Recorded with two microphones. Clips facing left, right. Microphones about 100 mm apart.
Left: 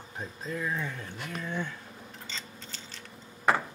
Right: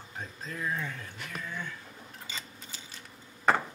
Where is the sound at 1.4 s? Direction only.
25° left (ahead or behind).